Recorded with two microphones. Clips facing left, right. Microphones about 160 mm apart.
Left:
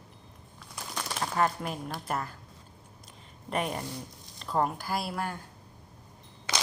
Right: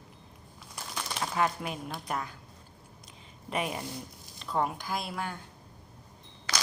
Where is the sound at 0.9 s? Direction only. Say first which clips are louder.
Left 1 dB; centre (ahead or behind).